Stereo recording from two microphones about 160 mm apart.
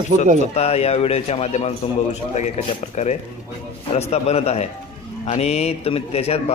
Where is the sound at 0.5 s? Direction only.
40° left (ahead or behind).